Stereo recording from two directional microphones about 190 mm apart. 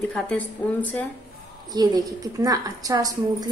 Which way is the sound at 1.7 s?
20° right (ahead or behind).